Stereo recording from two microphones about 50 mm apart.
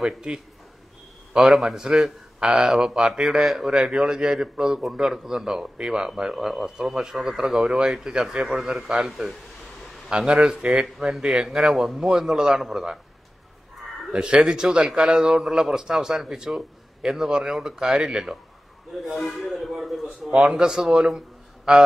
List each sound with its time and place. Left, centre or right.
0.0 s a man's voice: centre
14.1 s a man's voice: right
18.9 s a man's voice: centre
20.2 s a man's voice: centre